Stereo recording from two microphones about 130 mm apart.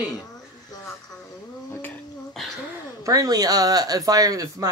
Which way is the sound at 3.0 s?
25° right (ahead or behind).